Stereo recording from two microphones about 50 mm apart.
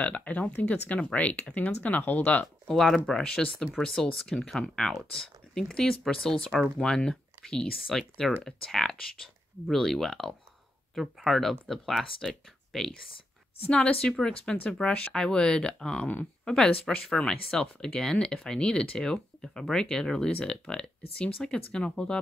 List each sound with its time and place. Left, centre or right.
0.0 s speech: left
2.4 s speech: centre
7.7 s speech: centre
14.0 s speech: centre